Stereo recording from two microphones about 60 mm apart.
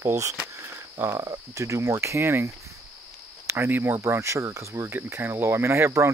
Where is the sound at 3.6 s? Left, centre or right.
Right.